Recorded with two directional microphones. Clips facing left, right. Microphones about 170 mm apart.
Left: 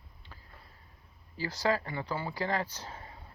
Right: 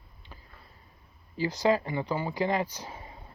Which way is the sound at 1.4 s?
20° right (ahead or behind).